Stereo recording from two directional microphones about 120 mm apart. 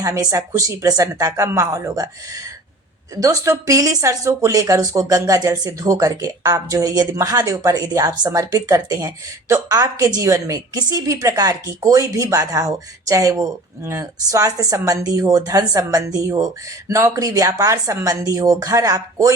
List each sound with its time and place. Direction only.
0.0 s speech: 30° right (ahead or behind)